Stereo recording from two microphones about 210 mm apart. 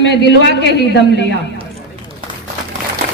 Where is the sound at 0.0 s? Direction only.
55° left (ahead or behind).